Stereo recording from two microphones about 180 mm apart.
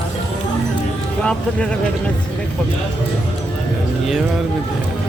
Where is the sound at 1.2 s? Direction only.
5° left (ahead or behind).